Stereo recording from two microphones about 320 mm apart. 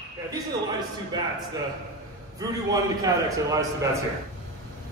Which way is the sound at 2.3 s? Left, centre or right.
Centre.